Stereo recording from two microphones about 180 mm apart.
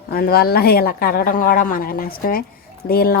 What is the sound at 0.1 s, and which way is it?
Speech, 60° left (ahead or behind).